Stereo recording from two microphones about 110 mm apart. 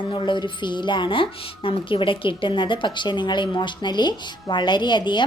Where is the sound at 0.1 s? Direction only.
50° left (ahead or behind).